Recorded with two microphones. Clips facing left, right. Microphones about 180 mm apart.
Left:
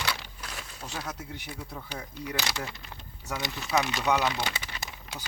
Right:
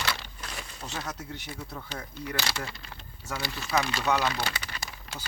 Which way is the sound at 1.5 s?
15° left (ahead or behind).